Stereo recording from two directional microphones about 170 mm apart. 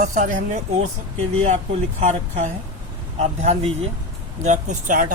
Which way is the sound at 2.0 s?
45° right (ahead or behind).